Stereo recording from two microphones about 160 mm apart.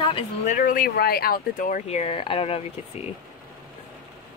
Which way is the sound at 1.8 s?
40° left (ahead or behind).